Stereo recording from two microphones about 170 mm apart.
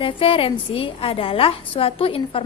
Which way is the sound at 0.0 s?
30° left (ahead or behind).